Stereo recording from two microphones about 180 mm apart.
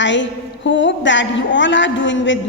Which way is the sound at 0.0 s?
90° left.